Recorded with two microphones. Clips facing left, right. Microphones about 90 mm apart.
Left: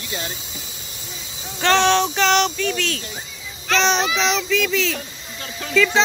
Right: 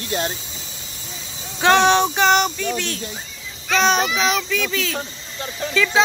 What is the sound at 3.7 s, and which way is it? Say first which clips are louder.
Speech: right 1 dB; 5° right (ahead or behind).